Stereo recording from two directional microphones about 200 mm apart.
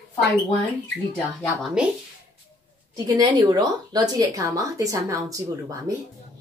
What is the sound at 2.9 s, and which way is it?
A woman's voice, 20° right (ahead or behind).